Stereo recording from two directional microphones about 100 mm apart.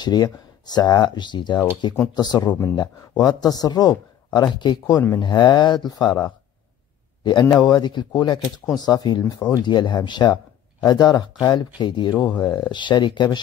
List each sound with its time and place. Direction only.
0.0 s a man's voice: 45° left (ahead or behind)